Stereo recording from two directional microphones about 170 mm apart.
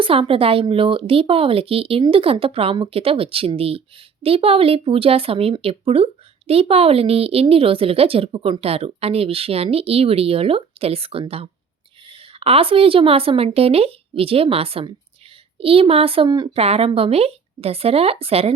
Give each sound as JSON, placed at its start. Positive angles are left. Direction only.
{"t": 0.0, "sound": "speech", "side_deg": -30}